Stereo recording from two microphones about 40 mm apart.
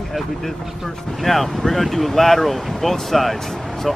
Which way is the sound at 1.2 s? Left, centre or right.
Centre.